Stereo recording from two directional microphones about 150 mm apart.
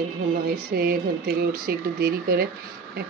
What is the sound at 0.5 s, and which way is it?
Speech, 75° right (ahead or behind).